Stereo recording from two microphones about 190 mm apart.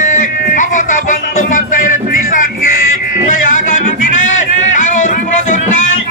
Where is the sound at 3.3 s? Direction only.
45° left (ahead or behind).